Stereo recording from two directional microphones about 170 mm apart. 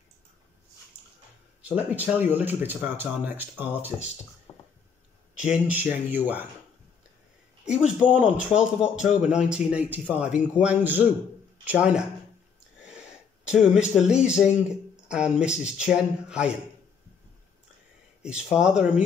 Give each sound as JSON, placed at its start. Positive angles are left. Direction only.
{"t": 1.6, "sound": "speech", "side_deg": -10}
{"t": 4.5, "sound": "a sound", "side_deg": 15}
{"t": 5.4, "sound": "speech", "side_deg": -5}
{"t": 8.1, "sound": "speech", "side_deg": -5}
{"t": 12.7, "sound": "a sound", "side_deg": -5}
{"t": 13.5, "sound": "speech", "side_deg": -5}
{"t": 18.2, "sound": "speech", "side_deg": -5}